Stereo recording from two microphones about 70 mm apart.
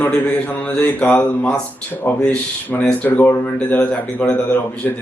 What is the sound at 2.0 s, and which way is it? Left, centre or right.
Speech, left.